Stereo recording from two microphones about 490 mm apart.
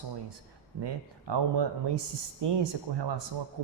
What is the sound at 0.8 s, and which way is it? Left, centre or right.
A man's voice, right.